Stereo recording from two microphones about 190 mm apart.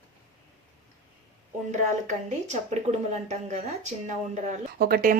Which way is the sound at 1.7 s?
40° right (ahead or behind).